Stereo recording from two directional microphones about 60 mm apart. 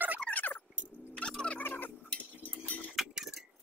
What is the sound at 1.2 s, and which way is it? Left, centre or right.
Fowl, centre.